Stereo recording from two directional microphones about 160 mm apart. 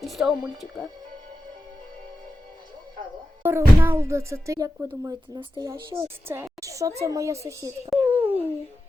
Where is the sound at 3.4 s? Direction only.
15° right (ahead or behind).